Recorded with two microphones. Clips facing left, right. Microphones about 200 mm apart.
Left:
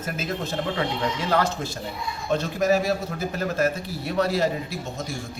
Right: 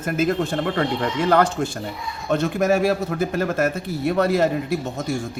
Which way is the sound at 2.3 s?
60° right (ahead or behind).